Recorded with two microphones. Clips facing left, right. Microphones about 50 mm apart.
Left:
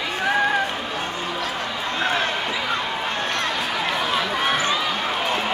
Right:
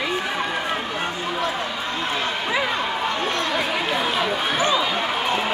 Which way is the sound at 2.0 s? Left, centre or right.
Left.